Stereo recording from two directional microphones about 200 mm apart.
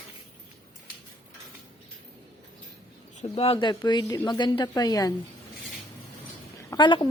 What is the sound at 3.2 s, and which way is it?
Speech, 30° left (ahead or behind).